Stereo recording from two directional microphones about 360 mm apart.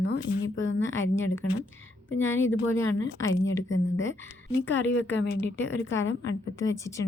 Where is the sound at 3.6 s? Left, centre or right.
Left.